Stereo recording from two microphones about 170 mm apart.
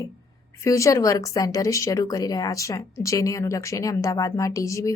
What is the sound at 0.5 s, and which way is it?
Speech, 20° left (ahead or behind).